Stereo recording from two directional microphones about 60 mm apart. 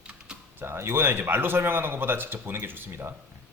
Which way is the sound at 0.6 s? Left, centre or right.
Right.